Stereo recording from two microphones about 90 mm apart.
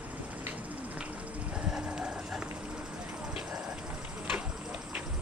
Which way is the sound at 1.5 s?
10° right (ahead or behind).